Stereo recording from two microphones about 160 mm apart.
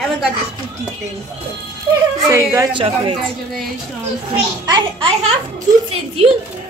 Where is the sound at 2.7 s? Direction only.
35° right (ahead or behind).